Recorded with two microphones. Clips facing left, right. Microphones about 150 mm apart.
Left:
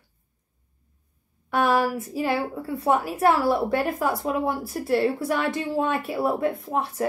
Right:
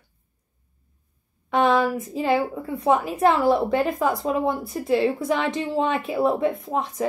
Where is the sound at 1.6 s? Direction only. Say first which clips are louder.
Right 2 dB; 5° left (ahead or behind).